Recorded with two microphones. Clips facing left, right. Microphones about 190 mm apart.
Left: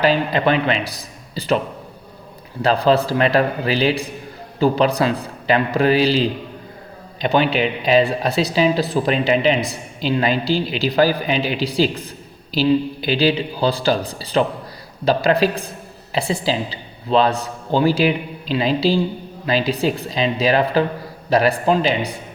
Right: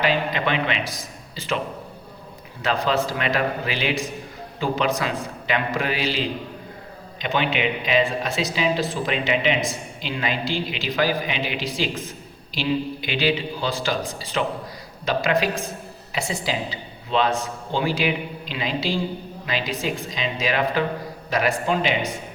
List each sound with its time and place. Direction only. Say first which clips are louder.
0.0 s a man's voice: left 6 dB; 35° left (ahead or behind)
2.6 s a man's voice: left 6 dB; 35° left (ahead or behind)